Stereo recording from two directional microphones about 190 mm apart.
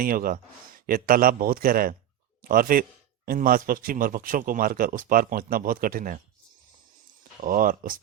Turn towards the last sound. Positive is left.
turn(degrees=-45)  # may be behind; listen again after turning